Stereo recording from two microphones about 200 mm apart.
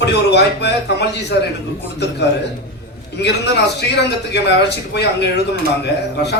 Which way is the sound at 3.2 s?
55° left (ahead or behind).